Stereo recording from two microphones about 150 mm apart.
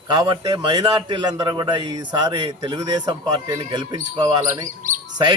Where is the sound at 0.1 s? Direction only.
30° right (ahead or behind).